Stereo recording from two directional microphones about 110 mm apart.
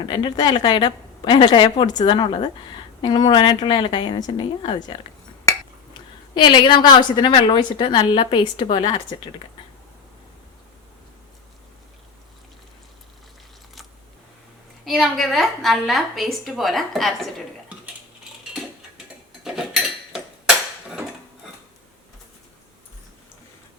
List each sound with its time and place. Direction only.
0.0 s a woman's voice: 50° left (ahead or behind)
14.8 s a woman's voice: centre (ahead or behind)
19.5 s cutlery: 5° right (ahead or behind)